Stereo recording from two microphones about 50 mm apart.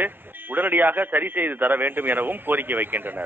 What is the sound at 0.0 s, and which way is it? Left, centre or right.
A woman's voice, right.